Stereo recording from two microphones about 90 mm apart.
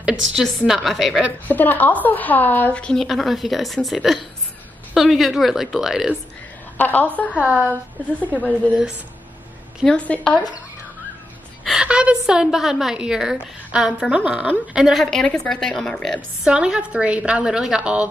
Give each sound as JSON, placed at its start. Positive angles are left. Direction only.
{"t": 0.0, "sound": "speech", "side_deg": -5}
{"t": 1.5, "sound": "a woman's voice", "side_deg": 20}
{"t": 6.8, "sound": "a woman's voice", "side_deg": 20}
{"t": 7.3, "sound": "a woman's voice", "side_deg": -15}
{"t": 8.2, "sound": "a woman's voice", "side_deg": 15}
{"t": 8.6, "sound": "a woman's voice", "side_deg": -15}
{"t": 9.8, "sound": "a woman's voice", "side_deg": 15}
{"t": 11.6, "sound": "a woman's voice", "side_deg": -5}
{"t": 16.4, "sound": "a woman's voice", "side_deg": -10}